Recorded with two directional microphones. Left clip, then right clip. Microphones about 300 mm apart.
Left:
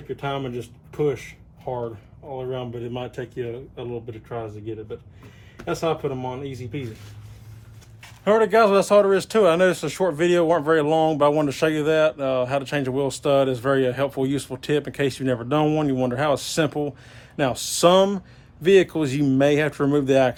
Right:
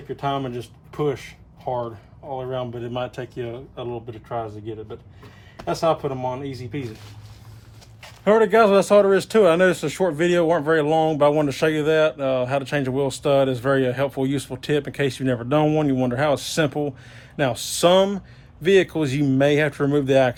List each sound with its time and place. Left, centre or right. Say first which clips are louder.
0.9 s a sound: left 1 dB; centre
1.6 s speech: right 3 dB; centre
4.3 s speech: right 3 dB; right
8.2 s a man's voice: right 1 dB; centre